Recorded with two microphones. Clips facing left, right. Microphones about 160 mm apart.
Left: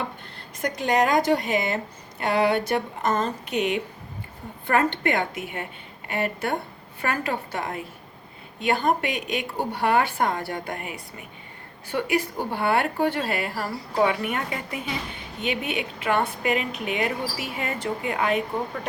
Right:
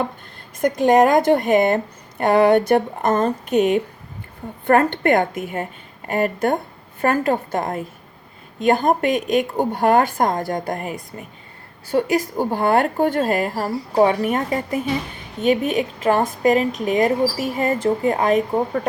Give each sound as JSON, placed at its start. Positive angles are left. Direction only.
{"t": 0.6, "sound": "a woman's voice", "side_deg": -50}